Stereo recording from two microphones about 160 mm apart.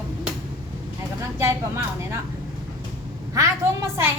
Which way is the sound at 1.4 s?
20° right (ahead or behind).